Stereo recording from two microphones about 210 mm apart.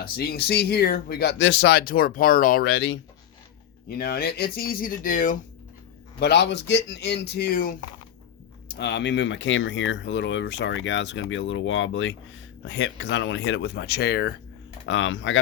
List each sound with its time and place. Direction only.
0.0 s speech: 45° left (ahead or behind)
3.8 s speech: 45° left (ahead or behind)
6.1 s speech: 50° left (ahead or behind)
8.7 s speech: 55° left (ahead or behind)
14.8 s speech: 60° left (ahead or behind)